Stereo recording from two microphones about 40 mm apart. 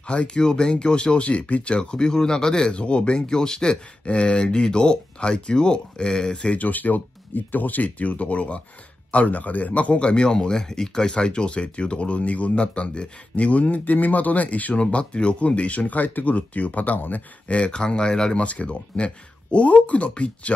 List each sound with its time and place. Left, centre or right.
0.0 s speech: left
6.6 s speech: left
12.2 s speech: left
17.5 s speech: left
18.4 s speech: left